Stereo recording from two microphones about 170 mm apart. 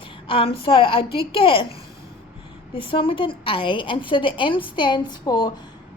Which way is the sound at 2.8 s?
30° left (ahead or behind).